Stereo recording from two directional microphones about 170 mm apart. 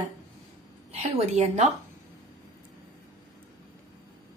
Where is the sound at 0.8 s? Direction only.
40° right (ahead or behind).